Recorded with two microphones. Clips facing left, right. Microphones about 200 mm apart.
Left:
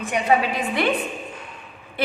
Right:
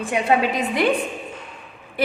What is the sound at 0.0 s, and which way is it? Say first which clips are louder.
Speech: right 1 dB; 25° right (ahead or behind).